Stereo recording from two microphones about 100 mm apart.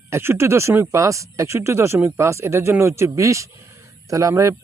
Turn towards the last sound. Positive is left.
turn(degrees=-30)  # may be behind; listen again after turning